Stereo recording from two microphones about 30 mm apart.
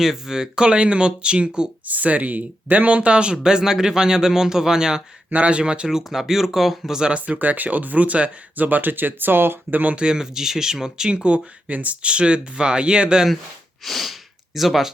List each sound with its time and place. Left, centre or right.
0.0 s speech: centre; by 1.6 s right
1.9 s speech: right
3.1 s speech: right
3.4 s speech: right
5.5 s speech: right
5.9 s speech: centre
7.3 s speech: right
10.1 s speech: centre
11.1 s speech: right
11.7 s speech: right
12.0 s speech: right
13.8 s speech: centre